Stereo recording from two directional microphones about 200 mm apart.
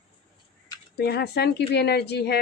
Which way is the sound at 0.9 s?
55° left (ahead or behind).